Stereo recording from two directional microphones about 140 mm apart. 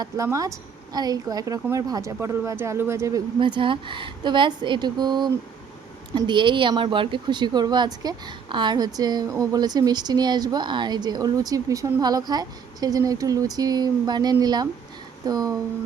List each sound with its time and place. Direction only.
0.0 s speech: 25° right (ahead or behind)
3.3 s speech: 35° right (ahead or behind)